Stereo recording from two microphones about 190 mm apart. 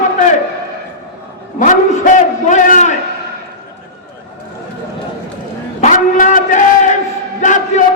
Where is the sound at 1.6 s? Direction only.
40° left (ahead or behind).